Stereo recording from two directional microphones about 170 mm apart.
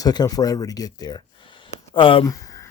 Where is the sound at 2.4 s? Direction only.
20° left (ahead or behind).